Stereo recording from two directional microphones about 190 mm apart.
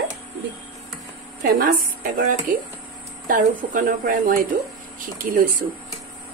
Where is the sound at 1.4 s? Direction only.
50° right (ahead or behind).